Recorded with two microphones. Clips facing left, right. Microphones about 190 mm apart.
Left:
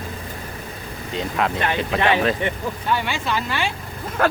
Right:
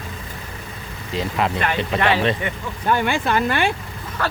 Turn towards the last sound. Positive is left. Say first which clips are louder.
# left 5 dB
turn(degrees=50)  # may be behind; listen again after turning